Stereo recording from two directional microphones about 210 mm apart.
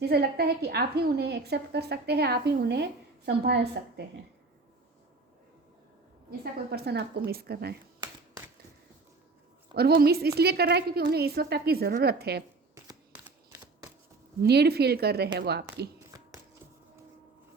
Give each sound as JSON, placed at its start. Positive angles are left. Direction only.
{"t": 0.0, "sound": "a woman's voice", "side_deg": -50}
{"t": 6.4, "sound": "a woman's voice", "side_deg": -50}
{"t": 9.7, "sound": "a woman's voice", "side_deg": -50}
{"t": 12.7, "sound": "camera", "side_deg": -10}
{"t": 14.4, "sound": "a woman's voice", "side_deg": -50}